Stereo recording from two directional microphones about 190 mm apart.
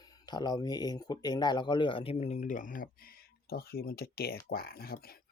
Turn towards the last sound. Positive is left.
turn(degrees=55)  # may be behind; listen again after turning